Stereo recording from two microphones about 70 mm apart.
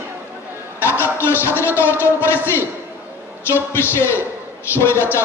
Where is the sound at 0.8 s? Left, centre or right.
Left.